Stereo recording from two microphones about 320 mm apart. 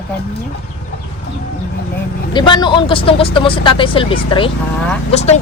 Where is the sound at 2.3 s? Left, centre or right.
Centre.